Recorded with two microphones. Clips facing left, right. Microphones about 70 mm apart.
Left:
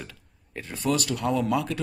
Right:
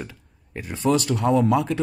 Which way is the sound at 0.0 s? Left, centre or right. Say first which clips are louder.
Right 6 dB; centre.